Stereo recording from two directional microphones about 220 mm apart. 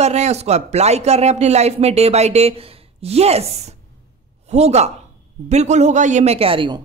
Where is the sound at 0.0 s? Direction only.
30° right (ahead or behind).